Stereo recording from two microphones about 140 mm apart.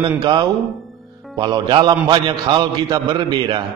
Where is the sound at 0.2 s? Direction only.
30° right (ahead or behind).